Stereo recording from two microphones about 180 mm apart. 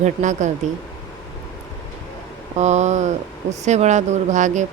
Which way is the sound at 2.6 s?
40° right (ahead or behind).